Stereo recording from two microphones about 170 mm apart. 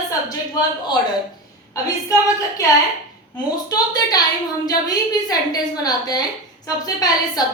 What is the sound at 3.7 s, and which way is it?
A woman's voice, 25° left (ahead or behind).